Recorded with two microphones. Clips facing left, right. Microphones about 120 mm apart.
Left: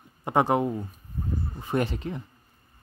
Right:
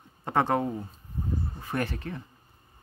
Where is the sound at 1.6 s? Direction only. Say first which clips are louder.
Left 7 dB; 20° left (ahead or behind).